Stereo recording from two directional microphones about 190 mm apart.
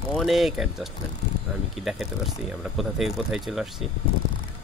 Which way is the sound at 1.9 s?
Centre (ahead or behind).